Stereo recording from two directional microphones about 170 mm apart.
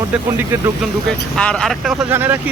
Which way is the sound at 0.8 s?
5° left (ahead or behind).